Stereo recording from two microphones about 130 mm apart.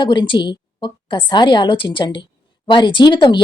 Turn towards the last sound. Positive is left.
turn(degrees=35)  # may be behind; listen again after turning